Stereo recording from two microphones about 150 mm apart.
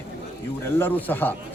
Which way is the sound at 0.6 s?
10° left (ahead or behind).